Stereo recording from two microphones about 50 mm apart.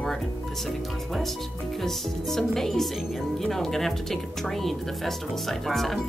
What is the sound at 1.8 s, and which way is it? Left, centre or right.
A woman's voice, centre.